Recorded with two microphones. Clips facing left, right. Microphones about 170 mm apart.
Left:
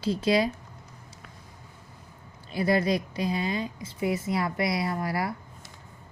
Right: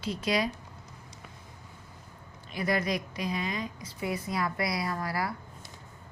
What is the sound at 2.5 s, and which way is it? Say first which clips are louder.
A woman's voice: left 5 dB; 30° left (ahead or behind).